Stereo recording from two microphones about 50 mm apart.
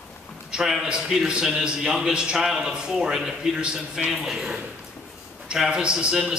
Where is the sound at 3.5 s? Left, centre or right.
Centre.